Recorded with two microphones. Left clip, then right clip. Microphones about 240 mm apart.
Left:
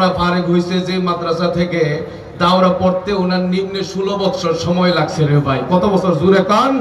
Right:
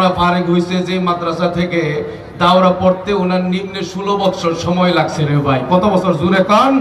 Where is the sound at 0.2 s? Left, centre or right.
Centre.